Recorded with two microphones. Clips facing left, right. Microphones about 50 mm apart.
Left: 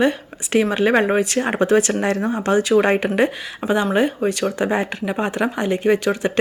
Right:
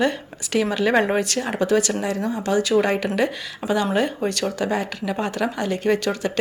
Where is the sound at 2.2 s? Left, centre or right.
Left.